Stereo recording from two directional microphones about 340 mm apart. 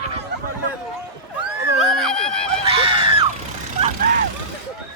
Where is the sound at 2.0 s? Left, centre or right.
Centre.